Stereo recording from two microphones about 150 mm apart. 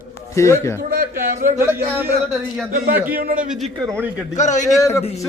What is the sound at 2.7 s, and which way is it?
Speech, 65° right (ahead or behind).